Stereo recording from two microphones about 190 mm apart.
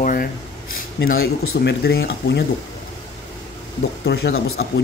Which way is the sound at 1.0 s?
55° left (ahead or behind).